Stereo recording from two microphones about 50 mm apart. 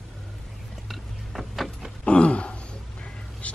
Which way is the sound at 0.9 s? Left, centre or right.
Centre.